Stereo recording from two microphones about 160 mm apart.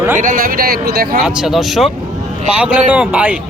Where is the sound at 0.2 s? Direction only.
60° right (ahead or behind).